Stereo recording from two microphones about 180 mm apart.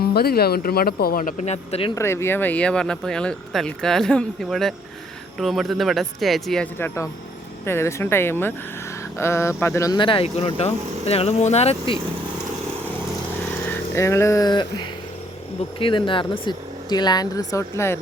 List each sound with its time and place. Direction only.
0.1 s speech: 60° left (ahead or behind); by 1.9 s 35° left (ahead or behind)
2.0 s speech: 15° left (ahead or behind); by 11.9 s 35° left (ahead or behind)
13.7 s speech: 15° left (ahead or behind)